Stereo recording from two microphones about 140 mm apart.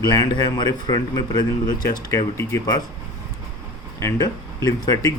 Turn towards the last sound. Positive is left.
turn(degrees=25)  # may be behind; listen again after turning